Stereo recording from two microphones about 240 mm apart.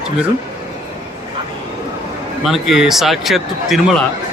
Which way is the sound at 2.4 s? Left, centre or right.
Centre.